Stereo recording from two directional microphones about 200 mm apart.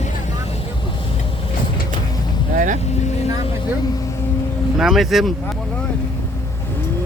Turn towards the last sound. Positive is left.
turn(degrees=0)  # may be behind; listen again after turning